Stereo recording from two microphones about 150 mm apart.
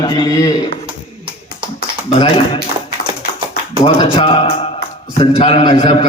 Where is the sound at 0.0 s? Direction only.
25° left (ahead or behind).